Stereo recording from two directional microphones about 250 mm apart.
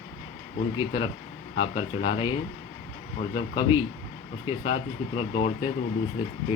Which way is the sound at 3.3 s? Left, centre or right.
Centre.